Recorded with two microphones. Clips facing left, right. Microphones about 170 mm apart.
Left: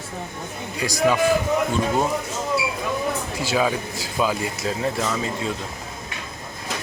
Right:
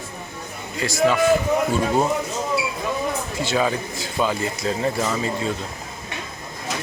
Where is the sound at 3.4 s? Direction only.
5° left (ahead or behind).